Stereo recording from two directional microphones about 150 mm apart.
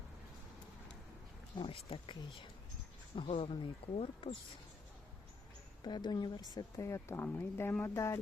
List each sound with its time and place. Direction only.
1.5 s speech: 35° left (ahead or behind)
3.2 s speech: 40° left (ahead or behind)
5.8 s speech: 30° left (ahead or behind)